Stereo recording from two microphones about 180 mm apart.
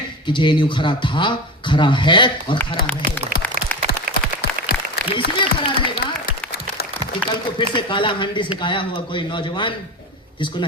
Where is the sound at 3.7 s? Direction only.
10° left (ahead or behind).